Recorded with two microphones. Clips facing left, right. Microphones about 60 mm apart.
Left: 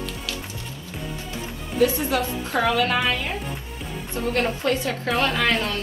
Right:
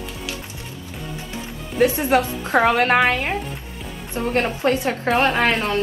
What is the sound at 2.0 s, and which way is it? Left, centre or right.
A woman's voice, right.